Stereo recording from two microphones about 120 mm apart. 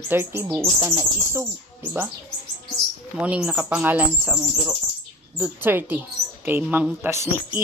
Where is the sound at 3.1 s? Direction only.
10° right (ahead or behind).